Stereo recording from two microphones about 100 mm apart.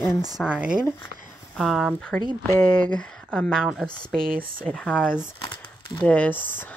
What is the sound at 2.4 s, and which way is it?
Speech, 25° left (ahead or behind).